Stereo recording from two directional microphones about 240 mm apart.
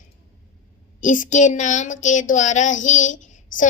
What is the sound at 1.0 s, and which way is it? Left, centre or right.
A woman's voice, left.